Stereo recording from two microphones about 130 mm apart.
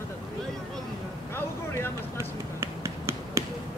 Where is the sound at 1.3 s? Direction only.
15° left (ahead or behind).